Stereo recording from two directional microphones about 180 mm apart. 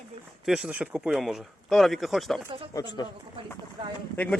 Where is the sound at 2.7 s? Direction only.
20° left (ahead or behind).